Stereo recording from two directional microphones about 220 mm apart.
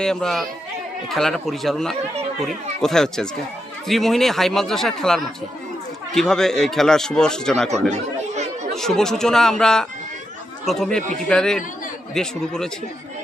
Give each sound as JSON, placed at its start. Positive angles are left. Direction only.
{"t": 0.0, "sound": "speech", "side_deg": 0}
{"t": 7.7, "sound": "chatter", "side_deg": -30}
{"t": 8.7, "sound": "speech", "side_deg": 0}